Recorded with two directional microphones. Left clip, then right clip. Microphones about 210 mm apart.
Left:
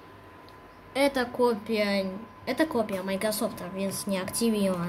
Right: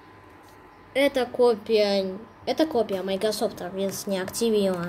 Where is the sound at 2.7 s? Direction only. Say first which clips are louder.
Right 4 dB; 10° left (ahead or behind).